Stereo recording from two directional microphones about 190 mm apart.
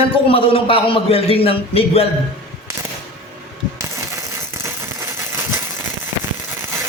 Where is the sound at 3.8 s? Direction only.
15° right (ahead or behind).